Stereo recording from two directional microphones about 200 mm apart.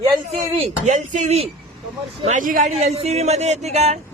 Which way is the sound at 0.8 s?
35° right (ahead or behind).